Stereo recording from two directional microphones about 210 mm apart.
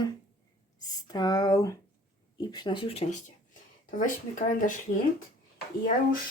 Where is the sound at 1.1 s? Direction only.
20° left (ahead or behind); by 4.8 s 35° left (ahead or behind).